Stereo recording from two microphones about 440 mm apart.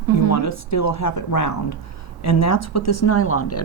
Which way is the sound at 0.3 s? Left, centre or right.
Left.